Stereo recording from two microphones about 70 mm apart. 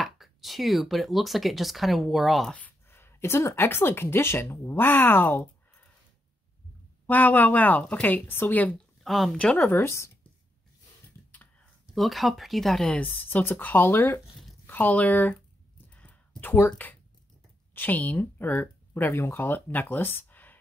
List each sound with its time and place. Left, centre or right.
0.0 s speech: centre
2.9 s speech: left
7.1 s speech: left
9.0 s speech: centre
9.4 s speech: centre
9.7 s speech: left
11.9 s speech: centre
13.0 s speech: left
14.7 s speech: left
15.9 s a sound: left
17.7 s speech: left